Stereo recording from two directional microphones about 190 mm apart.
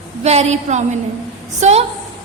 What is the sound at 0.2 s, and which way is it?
A woman's voice, 35° right (ahead or behind).